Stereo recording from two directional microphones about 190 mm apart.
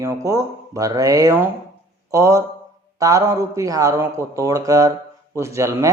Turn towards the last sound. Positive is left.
turn(degrees=-15)  # may be behind; listen again after turning